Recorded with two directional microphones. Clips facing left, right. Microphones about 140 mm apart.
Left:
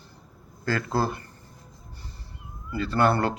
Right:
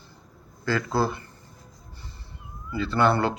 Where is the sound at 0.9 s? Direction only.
40° left (ahead or behind).